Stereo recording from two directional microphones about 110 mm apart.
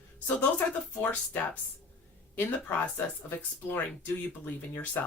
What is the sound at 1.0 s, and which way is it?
Speech, 15° left (ahead or behind).